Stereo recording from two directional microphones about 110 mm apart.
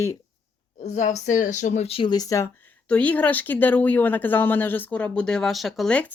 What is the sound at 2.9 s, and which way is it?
Speech, 15° left (ahead or behind).